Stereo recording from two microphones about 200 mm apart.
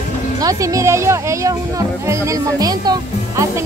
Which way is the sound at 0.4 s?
15° right (ahead or behind).